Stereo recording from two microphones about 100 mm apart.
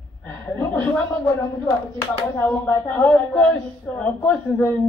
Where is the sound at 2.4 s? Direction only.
20° left (ahead or behind).